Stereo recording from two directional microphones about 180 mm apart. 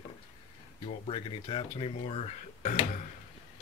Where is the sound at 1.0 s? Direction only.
30° left (ahead or behind).